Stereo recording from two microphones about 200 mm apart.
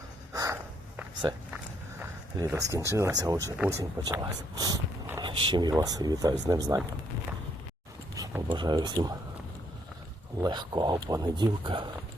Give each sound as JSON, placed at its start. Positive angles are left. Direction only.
{"t": 0.3, "sound": "snort", "side_deg": -15}
{"t": 2.0, "sound": "a sound", "side_deg": -15}
{"t": 2.9, "sound": "speech", "side_deg": -15}
{"t": 8.1, "sound": "speech", "side_deg": -15}
{"t": 10.4, "sound": "speech", "side_deg": -20}